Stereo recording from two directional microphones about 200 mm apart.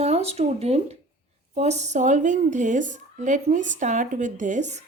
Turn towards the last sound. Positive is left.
turn(degrees=-35)  # may be behind; listen again after turning